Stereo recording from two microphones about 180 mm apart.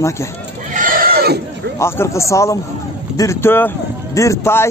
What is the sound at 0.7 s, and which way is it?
Neigh, 50° right (ahead or behind).